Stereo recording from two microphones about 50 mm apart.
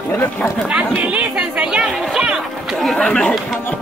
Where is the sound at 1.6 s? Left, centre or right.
Right.